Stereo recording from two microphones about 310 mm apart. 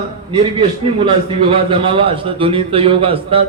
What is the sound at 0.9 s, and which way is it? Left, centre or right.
A man's voice, centre.